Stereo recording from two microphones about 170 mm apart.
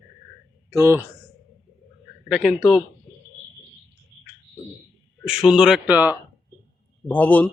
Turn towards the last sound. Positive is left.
turn(degrees=10)  # may be behind; listen again after turning